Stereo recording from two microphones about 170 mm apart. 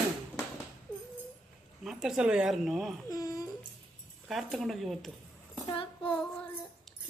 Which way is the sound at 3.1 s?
20° left (ahead or behind).